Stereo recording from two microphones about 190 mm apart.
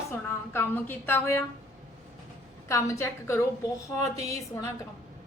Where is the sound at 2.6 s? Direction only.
15° left (ahead or behind).